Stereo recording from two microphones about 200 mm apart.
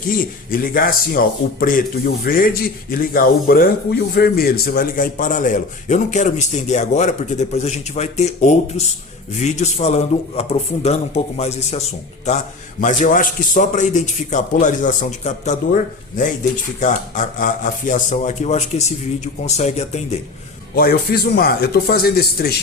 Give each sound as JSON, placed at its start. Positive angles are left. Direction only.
{"t": 0.1, "sound": "a man's voice", "side_deg": 45}
{"t": 20.7, "sound": "speech", "side_deg": 50}